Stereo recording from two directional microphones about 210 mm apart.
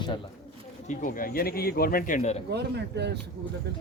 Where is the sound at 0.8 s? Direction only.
35° left (ahead or behind).